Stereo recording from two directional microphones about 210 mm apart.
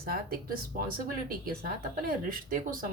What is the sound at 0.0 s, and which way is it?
A woman's voice, 45° right (ahead or behind).